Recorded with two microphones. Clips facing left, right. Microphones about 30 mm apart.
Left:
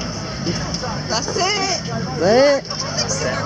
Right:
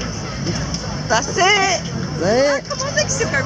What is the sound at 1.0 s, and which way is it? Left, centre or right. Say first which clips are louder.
Speech: right 6 dB; centre.